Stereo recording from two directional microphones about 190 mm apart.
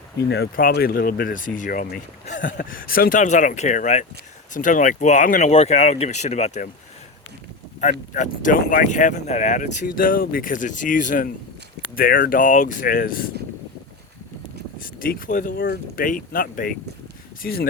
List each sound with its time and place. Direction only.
0.3 s speech: 60° left (ahead or behind); by 6.7 s 35° left (ahead or behind)
7.8 s speech: 40° left (ahead or behind)
9.8 s speech: 50° left (ahead or behind)
14.8 s speech: 50° left (ahead or behind)